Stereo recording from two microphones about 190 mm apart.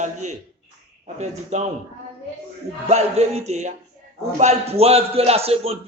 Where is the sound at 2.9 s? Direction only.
35° right (ahead or behind).